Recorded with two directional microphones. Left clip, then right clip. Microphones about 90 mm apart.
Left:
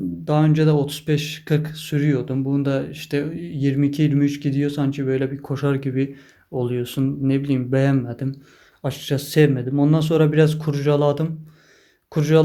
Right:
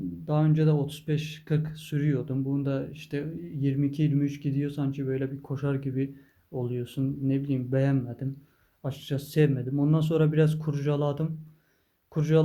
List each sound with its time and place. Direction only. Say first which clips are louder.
0.3 s speech: left 8 dB; 30° left (ahead or behind); by 2.5 s 15° left (ahead or behind)
2.5 s speech: left 10 dB; 25° left (ahead or behind)
8.9 s speech: left 10 dB; 20° left (ahead or behind)